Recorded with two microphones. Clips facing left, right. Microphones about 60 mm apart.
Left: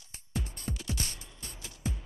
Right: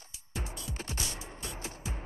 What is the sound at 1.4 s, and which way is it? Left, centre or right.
Music, right.